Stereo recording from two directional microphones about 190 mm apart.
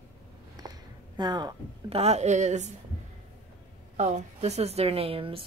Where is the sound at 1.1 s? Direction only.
20° right (ahead or behind).